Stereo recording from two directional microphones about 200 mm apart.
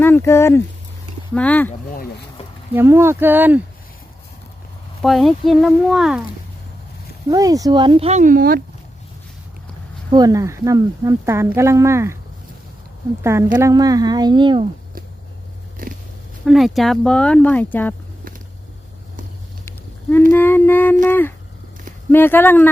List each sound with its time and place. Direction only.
0.0 s speech: 10° left (ahead or behind)
1.3 s humming: 5° left (ahead or behind)
1.9 s speech: 45° left (ahead or behind)
2.7 s speech: 10° right (ahead or behind)
5.0 s speech: centre (ahead or behind)
7.3 s speech: 15° right (ahead or behind); by 8.6 s 45° right (ahead or behind)
10.2 s speech: 15° right (ahead or behind)
13.2 s speech: 15° right (ahead or behind)
15.8 s pig: 45° right (ahead or behind)
16.5 s speech: centre (ahead or behind)
19.6 s a sound: 10° left (ahead or behind)
20.3 s humming: 10° left (ahead or behind)